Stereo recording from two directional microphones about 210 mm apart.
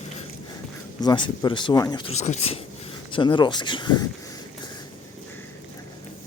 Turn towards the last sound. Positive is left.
turn(degrees=20)  # may be behind; listen again after turning